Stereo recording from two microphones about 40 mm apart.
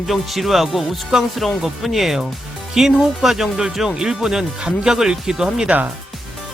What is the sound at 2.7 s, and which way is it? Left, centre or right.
Speech, centre.